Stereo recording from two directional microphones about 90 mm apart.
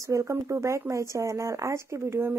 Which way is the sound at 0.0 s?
35° right (ahead or behind).